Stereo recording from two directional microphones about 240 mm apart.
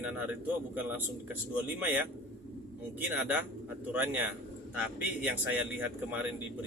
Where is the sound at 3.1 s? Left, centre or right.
Centre.